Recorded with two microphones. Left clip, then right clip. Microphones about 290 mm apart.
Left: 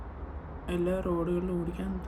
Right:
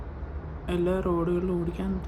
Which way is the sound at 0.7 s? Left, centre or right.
Centre.